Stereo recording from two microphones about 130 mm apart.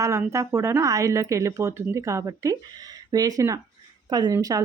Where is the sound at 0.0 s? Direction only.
20° right (ahead or behind).